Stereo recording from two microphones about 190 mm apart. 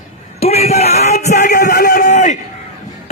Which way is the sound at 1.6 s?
55° left (ahead or behind).